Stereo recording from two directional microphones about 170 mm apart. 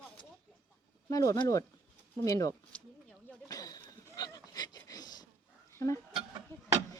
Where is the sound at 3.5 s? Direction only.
20° left (ahead or behind).